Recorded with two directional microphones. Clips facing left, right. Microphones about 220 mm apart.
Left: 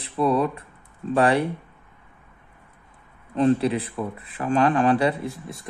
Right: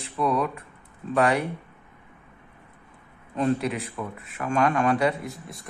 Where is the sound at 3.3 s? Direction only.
30° left (ahead or behind).